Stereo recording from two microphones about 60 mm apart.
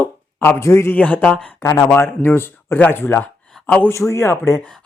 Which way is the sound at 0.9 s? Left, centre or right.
Left.